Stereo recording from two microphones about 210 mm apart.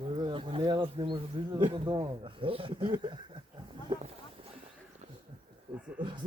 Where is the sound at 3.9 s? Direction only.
20° right (ahead or behind).